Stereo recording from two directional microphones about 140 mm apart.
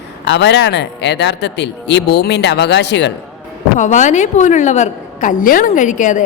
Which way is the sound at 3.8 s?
60° left (ahead or behind).